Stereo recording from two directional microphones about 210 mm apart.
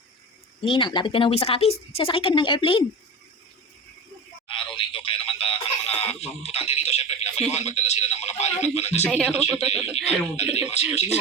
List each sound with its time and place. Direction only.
0.6 s speech: 25° left (ahead or behind)
4.4 s a sound: 25° left (ahead or behind)
7.5 s a man's voice: 30° left (ahead or behind)
9.0 s speech: centre (ahead or behind)
10.5 s a man's voice: 30° left (ahead or behind)